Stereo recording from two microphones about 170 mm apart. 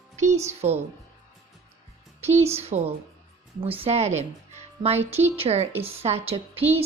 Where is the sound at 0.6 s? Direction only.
40° right (ahead or behind).